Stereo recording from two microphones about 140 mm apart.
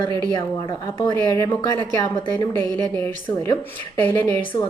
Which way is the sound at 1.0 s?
30° left (ahead or behind).